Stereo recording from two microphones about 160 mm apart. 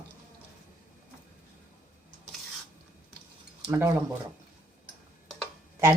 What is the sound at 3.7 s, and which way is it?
Speech, 15° right (ahead or behind).